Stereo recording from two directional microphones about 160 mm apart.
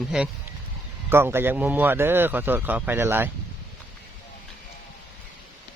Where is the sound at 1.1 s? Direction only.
15° right (ahead or behind).